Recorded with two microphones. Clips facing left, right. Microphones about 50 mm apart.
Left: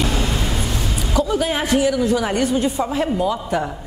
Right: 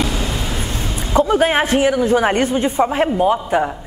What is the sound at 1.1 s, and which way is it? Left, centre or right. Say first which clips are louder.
A man's voice: right 6 dB; right.